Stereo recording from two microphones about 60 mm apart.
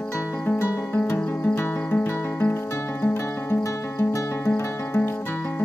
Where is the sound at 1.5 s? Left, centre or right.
Left.